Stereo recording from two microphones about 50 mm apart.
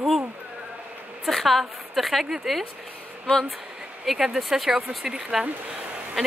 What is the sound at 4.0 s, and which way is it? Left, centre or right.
Speech, centre.